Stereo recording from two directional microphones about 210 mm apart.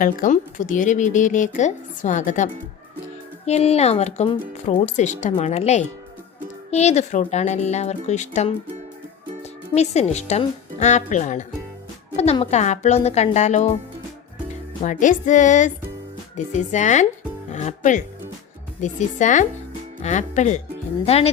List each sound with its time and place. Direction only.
0.0 s a woman's voice: 40° left (ahead or behind)
14.8 s speech: 35° left (ahead or behind)
17.5 s music: 35° left (ahead or behind)
18.8 s speech: 35° left (ahead or behind)